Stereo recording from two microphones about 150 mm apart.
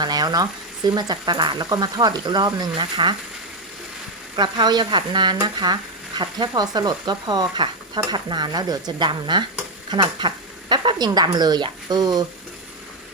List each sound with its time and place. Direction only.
0.0 s speech: 25° right (ahead or behind)
4.4 s speech: 30° right (ahead or behind)